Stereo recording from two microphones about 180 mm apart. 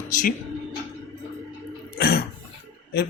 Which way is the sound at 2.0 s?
60° left (ahead or behind).